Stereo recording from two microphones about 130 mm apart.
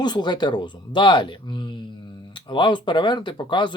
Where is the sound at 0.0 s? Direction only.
35° left (ahead or behind).